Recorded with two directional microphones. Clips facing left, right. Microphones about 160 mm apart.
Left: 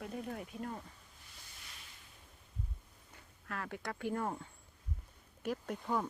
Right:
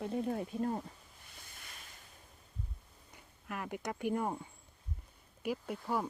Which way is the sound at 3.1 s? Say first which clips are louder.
Right 1 dB; 15° right (ahead or behind).